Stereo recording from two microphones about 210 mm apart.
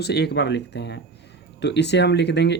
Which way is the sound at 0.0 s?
50° left (ahead or behind).